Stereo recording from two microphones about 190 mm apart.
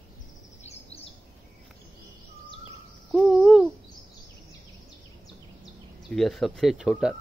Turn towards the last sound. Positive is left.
turn(degrees=-5)  # may be behind; listen again after turning